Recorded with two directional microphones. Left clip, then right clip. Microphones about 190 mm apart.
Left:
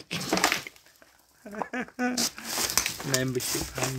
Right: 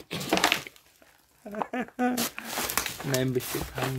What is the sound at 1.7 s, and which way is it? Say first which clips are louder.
Speech: right 2 dB; 10° right (ahead or behind).